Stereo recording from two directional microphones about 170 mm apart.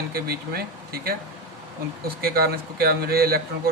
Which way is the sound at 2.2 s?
60° right (ahead or behind).